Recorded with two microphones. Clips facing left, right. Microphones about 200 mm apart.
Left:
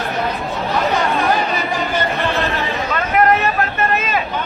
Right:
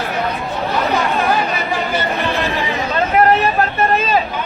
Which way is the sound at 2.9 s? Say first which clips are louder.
Right 2 dB; 30° right (ahead or behind).